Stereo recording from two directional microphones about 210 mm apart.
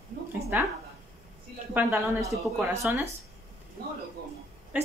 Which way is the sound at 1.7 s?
10° right (ahead or behind).